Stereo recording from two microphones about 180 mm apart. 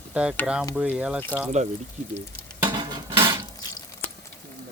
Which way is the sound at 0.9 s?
5° right (ahead or behind).